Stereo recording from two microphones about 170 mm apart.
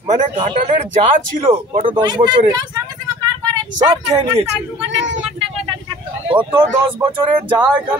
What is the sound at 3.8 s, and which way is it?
Speech, 25° right (ahead or behind).